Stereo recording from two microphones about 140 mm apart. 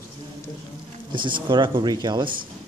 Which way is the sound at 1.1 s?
35° right (ahead or behind).